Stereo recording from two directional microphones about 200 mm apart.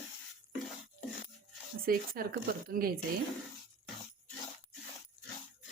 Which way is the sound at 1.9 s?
50° right (ahead or behind).